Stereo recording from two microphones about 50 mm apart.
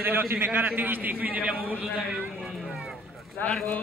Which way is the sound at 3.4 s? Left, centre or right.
Left.